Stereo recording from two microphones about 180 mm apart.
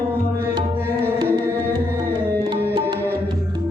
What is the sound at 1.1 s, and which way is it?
Music, 20° right (ahead or behind).